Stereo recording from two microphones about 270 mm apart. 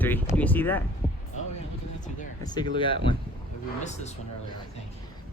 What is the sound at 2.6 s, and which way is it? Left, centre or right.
Speech, centre.